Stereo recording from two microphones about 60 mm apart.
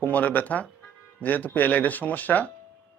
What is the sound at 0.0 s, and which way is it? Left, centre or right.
Speech, left.